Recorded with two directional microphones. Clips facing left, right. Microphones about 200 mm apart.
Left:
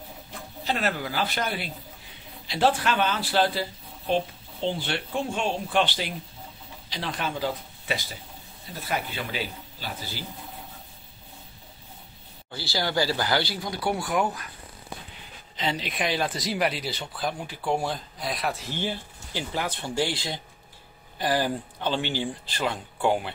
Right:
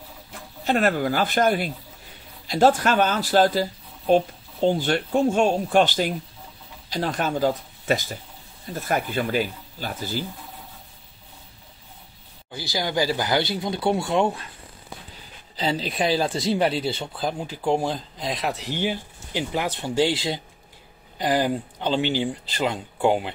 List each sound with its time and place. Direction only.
0.7 s speech: 50° right (ahead or behind)
12.5 s speech: 15° right (ahead or behind)
15.5 s speech: 35° right (ahead or behind)